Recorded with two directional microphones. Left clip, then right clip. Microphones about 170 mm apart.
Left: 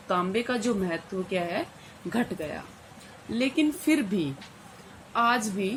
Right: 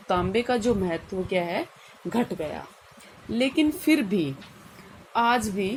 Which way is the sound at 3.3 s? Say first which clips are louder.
Right 2 dB; 25° right (ahead or behind).